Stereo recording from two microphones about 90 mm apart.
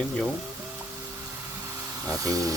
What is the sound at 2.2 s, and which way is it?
Speech, 40° right (ahead or behind).